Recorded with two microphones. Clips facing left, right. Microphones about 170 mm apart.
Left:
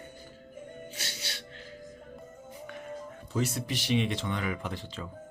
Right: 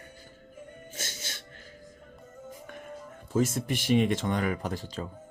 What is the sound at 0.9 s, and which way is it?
Music, 45° right (ahead or behind).